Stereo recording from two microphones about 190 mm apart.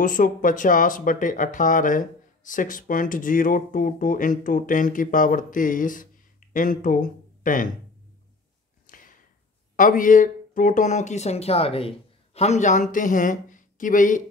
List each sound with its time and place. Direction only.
0.0 s speech: 45° left (ahead or behind)
8.8 s a sound: 45° left (ahead or behind)
9.8 s speech: 45° left (ahead or behind)